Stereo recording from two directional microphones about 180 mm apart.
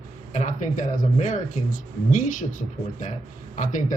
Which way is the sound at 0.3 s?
45° left (ahead or behind).